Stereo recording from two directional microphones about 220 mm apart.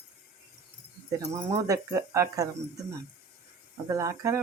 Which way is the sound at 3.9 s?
15° right (ahead or behind).